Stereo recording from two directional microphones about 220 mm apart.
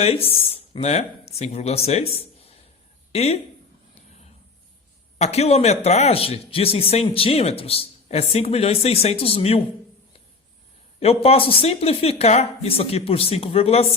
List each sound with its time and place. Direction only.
0.0 s speech: 25° left (ahead or behind)
5.1 s speech: 30° left (ahead or behind)
11.0 s speech: 25° left (ahead or behind)